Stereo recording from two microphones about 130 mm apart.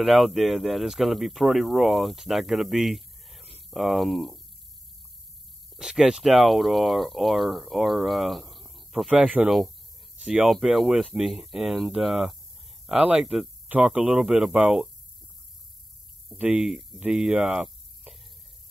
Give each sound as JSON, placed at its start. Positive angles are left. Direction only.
{"t": 0.0, "sound": "speech", "side_deg": 0}
{"t": 5.7, "sound": "speech", "side_deg": -5}
{"t": 16.3, "sound": "speech", "side_deg": -5}